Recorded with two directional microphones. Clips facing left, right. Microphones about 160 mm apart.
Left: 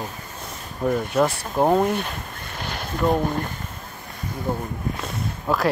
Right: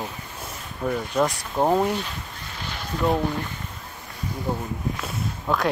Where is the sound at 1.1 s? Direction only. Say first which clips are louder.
Left 2 dB; 5° left (ahead or behind).